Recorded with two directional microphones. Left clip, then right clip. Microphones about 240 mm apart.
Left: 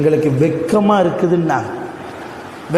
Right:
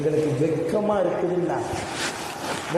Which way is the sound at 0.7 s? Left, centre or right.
Left.